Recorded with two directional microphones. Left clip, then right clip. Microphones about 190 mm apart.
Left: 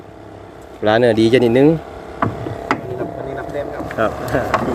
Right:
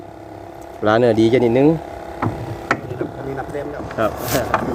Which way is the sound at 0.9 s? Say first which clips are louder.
Left 1 dB; 5° right (ahead or behind).